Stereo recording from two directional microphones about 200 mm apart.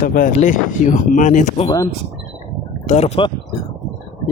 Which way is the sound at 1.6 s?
15° left (ahead or behind).